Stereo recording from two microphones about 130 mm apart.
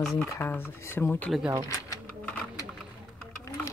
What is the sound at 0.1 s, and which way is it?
Speech, 15° left (ahead or behind).